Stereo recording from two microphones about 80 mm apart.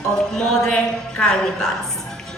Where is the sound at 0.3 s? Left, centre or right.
Centre.